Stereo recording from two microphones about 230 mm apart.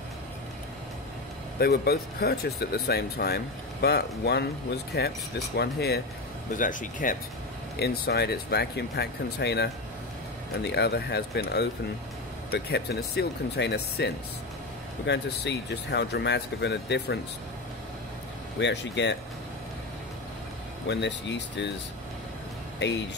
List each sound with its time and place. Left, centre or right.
1.6 s speech: left
6.5 s speech: left
18.6 s speech: left
20.9 s speech: left